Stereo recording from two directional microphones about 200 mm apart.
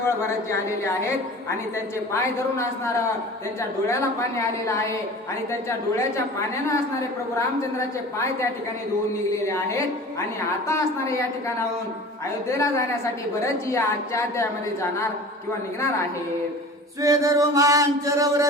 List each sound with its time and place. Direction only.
2.1 s a woman's voice: 15° left (ahead or behind)
7.3 s a woman's voice: 15° left (ahead or behind)
9.5 s a woman's voice: 15° left (ahead or behind)
17.0 s mantra: 15° right (ahead or behind)